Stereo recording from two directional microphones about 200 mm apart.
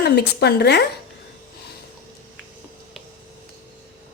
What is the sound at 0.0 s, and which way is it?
Speech, 55° left (ahead or behind).